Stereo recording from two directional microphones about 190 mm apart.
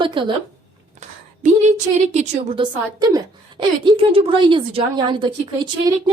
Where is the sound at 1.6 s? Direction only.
35° right (ahead or behind).